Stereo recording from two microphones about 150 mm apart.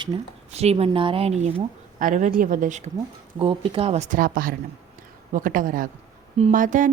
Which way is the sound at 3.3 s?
40° right (ahead or behind).